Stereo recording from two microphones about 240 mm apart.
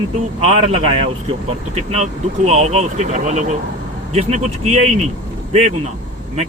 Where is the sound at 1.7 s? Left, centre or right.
Right.